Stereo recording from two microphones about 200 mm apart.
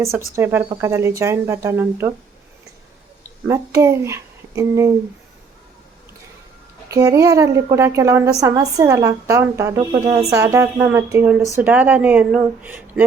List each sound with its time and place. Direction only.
0.3 s a woman's voice: 10° right (ahead or behind)
3.4 s a child's voice: 15° right (ahead or behind)
6.8 s a woman's voice: 15° right (ahead or behind)